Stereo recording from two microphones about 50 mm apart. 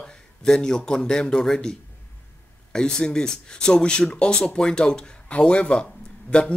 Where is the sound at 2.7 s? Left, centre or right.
Centre.